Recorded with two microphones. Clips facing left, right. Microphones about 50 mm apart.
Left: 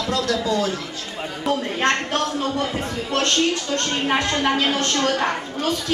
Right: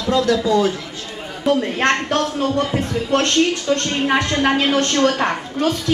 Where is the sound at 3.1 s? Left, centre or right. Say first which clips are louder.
Right 3 dB; right.